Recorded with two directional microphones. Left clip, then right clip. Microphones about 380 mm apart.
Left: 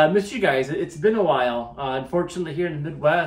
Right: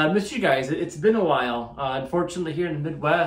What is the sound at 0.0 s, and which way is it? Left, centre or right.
Speech, centre.